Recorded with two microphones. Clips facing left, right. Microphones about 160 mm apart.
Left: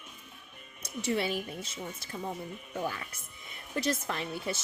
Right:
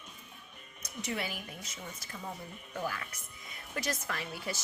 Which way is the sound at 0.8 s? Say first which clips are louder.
Left 6 dB; 30° left (ahead or behind).